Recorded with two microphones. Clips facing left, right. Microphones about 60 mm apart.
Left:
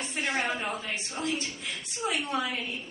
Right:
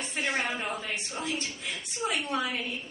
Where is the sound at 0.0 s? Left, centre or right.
Centre.